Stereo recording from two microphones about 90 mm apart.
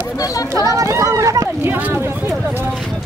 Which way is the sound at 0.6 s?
40° right (ahead or behind).